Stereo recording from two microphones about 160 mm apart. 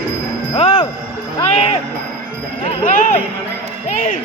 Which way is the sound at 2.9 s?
55° left (ahead or behind).